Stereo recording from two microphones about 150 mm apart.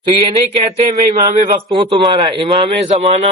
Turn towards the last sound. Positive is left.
turn(degrees=-35)  # may be behind; listen again after turning